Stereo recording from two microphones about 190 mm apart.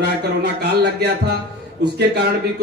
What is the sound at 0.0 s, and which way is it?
A man's voice, 60° right (ahead or behind).